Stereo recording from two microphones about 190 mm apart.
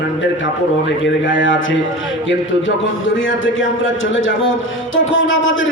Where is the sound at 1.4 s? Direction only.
80° left.